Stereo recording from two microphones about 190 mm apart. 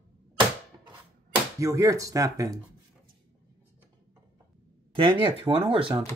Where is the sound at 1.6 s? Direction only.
15° right (ahead or behind).